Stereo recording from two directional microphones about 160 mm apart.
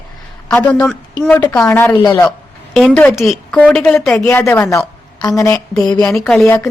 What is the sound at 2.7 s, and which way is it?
A woman's voice, 5° left (ahead or behind).